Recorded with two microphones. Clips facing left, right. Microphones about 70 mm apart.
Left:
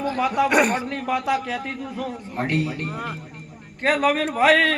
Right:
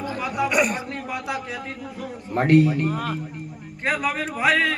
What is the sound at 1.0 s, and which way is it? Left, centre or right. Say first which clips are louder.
Speech: left 6 dB; left.